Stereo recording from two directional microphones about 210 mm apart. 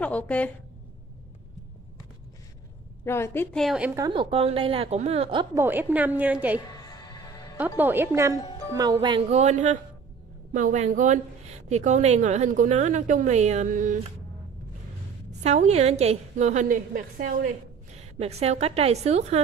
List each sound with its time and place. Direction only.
0.0 s a woman's voice: 5° left (ahead or behind)
3.1 s a woman's voice: 10° left (ahead or behind); by 4.1 s 10° right (ahead or behind)
4.1 s a woman's voice: 25° right (ahead or behind)
5.6 s a woman's voice: 10° right (ahead or behind)
6.8 s music: 20° left (ahead or behind)
7.5 s a woman's voice: 10° right (ahead or behind)
9.4 s a woman's voice: 35° right (ahead or behind)
15.4 s a woman's voice: 30° right (ahead or behind)